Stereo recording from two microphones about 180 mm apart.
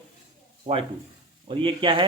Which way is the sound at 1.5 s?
30° right (ahead or behind).